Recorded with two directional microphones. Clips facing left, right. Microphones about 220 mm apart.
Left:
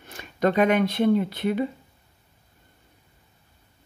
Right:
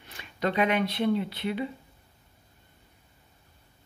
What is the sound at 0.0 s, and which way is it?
Speech, 45° left (ahead or behind).